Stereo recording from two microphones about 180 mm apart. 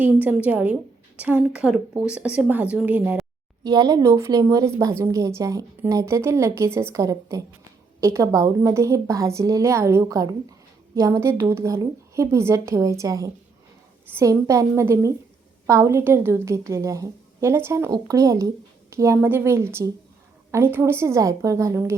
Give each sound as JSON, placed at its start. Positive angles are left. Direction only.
{"t": 0.0, "sound": "a woman's voice", "side_deg": -10}
{"t": 3.6, "sound": "a woman's voice", "side_deg": -20}